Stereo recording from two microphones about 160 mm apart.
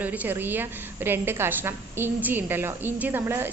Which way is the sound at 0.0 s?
10° right (ahead or behind).